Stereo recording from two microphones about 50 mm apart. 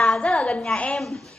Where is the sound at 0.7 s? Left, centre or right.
Left.